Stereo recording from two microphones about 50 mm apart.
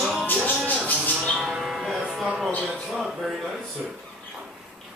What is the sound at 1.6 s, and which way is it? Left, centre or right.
Speech, centre.